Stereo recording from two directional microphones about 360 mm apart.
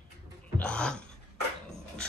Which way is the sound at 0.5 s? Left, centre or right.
Centre.